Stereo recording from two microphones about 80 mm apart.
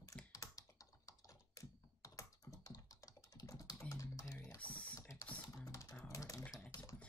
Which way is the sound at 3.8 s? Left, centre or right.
Left.